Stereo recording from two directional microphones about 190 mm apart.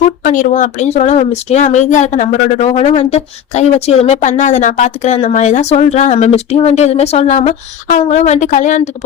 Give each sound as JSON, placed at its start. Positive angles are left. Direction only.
{"t": 0.2, "sound": "speech", "side_deg": 45}